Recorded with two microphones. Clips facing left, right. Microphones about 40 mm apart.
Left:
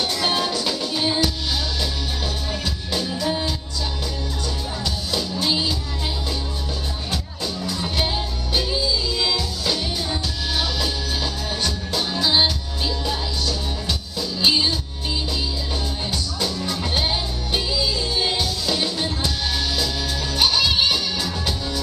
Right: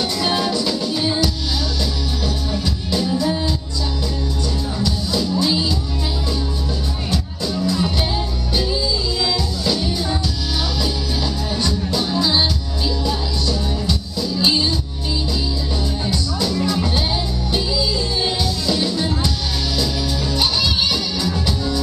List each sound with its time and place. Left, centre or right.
0.6 s music: centre
2.5 s music: left
3.1 s music: centre
5.4 s music: centre
9.2 s music: centre
11.5 s music: centre
14.4 s music: centre
16.8 s music: centre
20.3 s music: left